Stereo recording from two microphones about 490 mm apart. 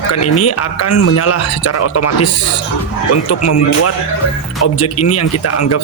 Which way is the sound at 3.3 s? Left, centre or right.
Left.